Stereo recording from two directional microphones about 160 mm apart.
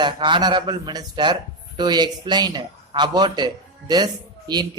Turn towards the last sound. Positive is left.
turn(degrees=-25)  # may be behind; listen again after turning